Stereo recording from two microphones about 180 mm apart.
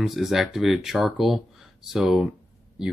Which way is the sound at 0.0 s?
Centre (ahead or behind).